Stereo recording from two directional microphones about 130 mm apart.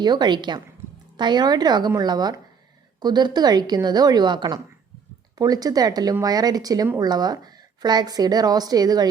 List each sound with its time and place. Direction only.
0.0 s a woman's voice: 35° right (ahead or behind)